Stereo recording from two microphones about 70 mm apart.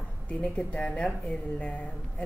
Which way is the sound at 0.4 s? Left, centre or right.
Centre.